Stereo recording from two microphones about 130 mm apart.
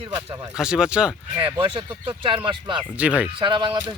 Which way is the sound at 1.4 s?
40° right (ahead or behind).